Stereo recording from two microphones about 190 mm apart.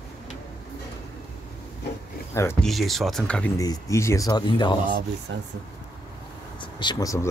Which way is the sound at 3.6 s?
15° left (ahead or behind).